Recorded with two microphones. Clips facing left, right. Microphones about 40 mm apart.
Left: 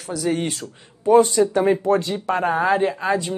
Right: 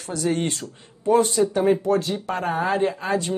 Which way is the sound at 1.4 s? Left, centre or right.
Left.